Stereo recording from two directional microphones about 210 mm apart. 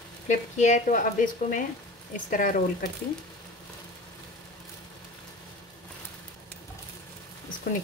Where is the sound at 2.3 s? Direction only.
40° left (ahead or behind).